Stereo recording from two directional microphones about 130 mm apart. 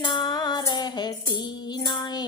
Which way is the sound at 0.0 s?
35° left (ahead or behind).